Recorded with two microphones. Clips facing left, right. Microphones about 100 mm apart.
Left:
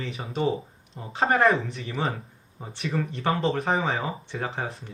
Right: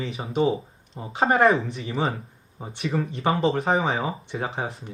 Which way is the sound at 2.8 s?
30° right (ahead or behind).